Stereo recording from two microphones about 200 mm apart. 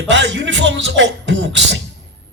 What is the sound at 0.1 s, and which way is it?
A man's voice, 65° right (ahead or behind).